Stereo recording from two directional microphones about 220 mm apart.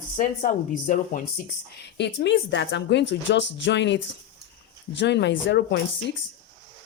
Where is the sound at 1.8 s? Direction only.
50° left (ahead or behind).